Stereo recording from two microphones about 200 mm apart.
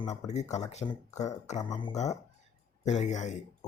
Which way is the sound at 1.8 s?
25° left (ahead or behind).